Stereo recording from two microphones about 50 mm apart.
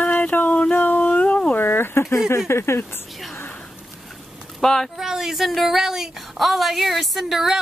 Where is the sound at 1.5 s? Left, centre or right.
Left.